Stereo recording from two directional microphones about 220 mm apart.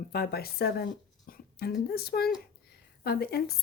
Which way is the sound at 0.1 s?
45° left (ahead or behind).